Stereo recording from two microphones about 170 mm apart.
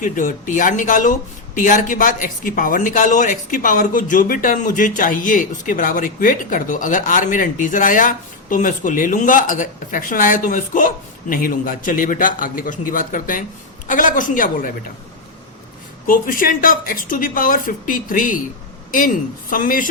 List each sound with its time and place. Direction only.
0.0 s speech: 50° left (ahead or behind)
16.0 s a woman's voice: 55° left (ahead or behind)